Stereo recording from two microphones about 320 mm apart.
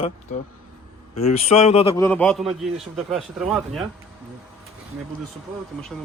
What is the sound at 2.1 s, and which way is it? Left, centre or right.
Speech, centre.